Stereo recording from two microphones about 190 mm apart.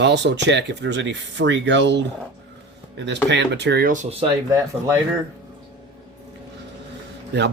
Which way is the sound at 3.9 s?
35° right (ahead or behind).